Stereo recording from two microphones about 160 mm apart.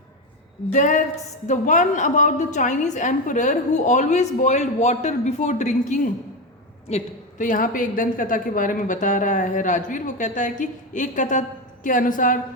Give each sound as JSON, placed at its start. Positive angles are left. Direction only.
{"t": 0.7, "sound": "a woman's voice", "side_deg": 50}